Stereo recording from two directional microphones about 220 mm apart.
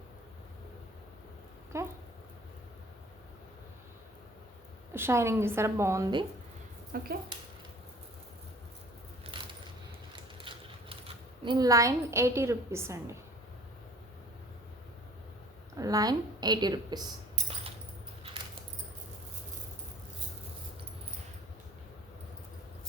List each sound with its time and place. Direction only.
1.7 s a woman's voice: 15° right (ahead or behind)
4.9 s a woman's voice: 10° right (ahead or behind)
6.9 s speech: 45° right (ahead or behind)
10.1 s mechanisms: 25° right (ahead or behind)
11.4 s a woman's voice: 15° right (ahead or behind)
15.8 s a woman's voice: 15° right (ahead or behind)
17.3 s a sound: 25° right (ahead or behind)